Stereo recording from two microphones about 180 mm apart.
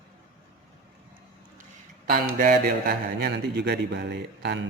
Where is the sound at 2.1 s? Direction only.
50° right (ahead or behind).